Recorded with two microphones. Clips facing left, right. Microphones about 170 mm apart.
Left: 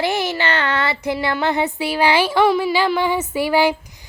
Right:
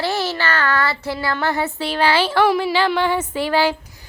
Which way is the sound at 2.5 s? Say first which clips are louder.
Left 1 dB; centre (ahead or behind).